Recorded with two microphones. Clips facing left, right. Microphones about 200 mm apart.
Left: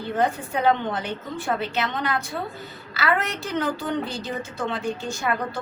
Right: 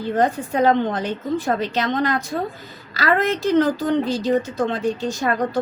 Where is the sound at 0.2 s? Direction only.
40° right (ahead or behind).